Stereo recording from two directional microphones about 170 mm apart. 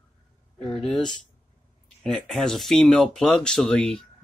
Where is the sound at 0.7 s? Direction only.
Centre (ahead or behind).